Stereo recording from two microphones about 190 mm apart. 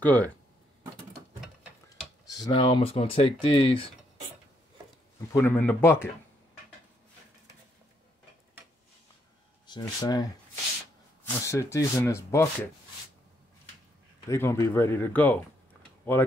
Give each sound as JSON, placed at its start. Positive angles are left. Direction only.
{"t": 0.0, "sound": "speech", "side_deg": 10}
{"t": 2.2, "sound": "speech", "side_deg": 20}
{"t": 5.3, "sound": "speech", "side_deg": 10}
{"t": 9.7, "sound": "speech", "side_deg": 20}
{"t": 11.2, "sound": "speech", "side_deg": 15}
{"t": 14.3, "sound": "speech", "side_deg": 15}